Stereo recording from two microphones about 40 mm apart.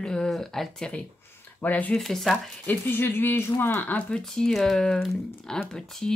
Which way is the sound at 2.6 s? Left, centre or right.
Left.